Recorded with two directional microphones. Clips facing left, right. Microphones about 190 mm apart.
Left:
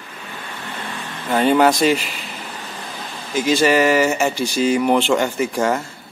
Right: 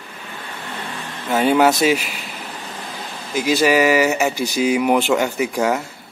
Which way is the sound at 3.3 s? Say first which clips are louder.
Even; 5° right (ahead or behind).